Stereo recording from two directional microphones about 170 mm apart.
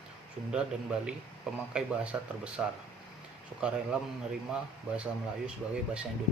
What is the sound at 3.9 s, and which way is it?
Speech, 5° right (ahead or behind).